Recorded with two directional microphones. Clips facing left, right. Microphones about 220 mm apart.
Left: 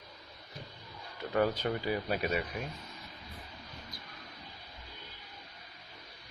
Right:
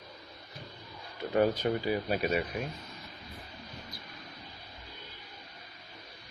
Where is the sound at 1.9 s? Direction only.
30° right (ahead or behind).